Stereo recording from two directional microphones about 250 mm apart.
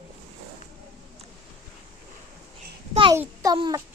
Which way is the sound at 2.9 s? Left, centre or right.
Centre.